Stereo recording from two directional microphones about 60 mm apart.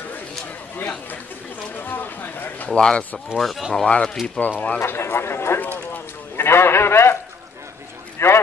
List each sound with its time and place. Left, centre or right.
0.7 s a man's voice: left
1.8 s a sound: left
2.7 s speech: centre
3.3 s speech: centre
3.7 s speech: centre
4.4 s a man's voice: left
4.7 s a man's voice: left
8.2 s a sound: left